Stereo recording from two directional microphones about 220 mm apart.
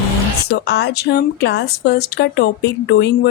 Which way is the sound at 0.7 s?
50° left (ahead or behind).